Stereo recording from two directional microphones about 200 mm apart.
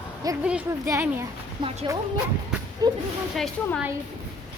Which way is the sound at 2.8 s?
20° right (ahead or behind).